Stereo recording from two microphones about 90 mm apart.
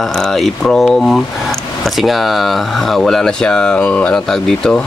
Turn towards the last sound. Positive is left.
turn(degrees=5)  # may be behind; listen again after turning